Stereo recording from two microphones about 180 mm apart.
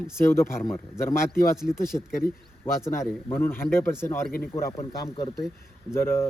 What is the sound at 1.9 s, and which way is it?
Speech, 30° left (ahead or behind).